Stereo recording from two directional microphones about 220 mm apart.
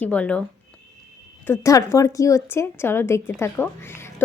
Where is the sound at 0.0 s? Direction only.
5° left (ahead or behind).